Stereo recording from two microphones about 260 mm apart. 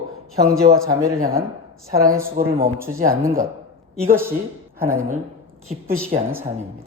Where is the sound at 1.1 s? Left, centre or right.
Right.